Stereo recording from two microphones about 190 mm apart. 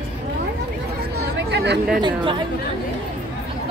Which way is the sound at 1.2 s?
60° right (ahead or behind).